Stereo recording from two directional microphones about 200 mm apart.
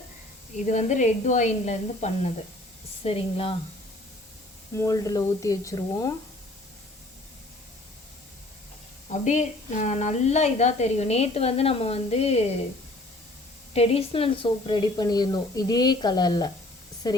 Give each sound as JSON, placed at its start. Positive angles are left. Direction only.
{"t": 0.6, "sound": "speech", "side_deg": 35}
{"t": 4.7, "sound": "speech", "side_deg": 15}
{"t": 9.0, "sound": "speech", "side_deg": 35}
{"t": 13.7, "sound": "speech", "side_deg": 30}